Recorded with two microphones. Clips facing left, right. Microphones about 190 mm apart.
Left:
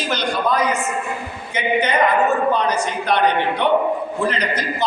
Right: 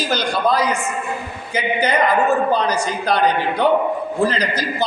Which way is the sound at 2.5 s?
35° right (ahead or behind).